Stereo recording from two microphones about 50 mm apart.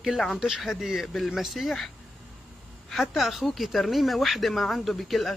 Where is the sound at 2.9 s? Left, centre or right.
Centre.